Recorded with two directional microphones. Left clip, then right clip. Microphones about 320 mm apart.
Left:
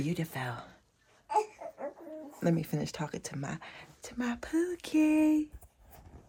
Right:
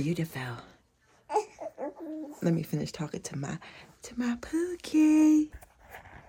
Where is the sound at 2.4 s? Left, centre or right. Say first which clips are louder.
Even; centre.